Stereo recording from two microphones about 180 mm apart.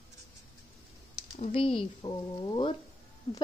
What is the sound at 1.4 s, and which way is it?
Speech, 30° left (ahead or behind).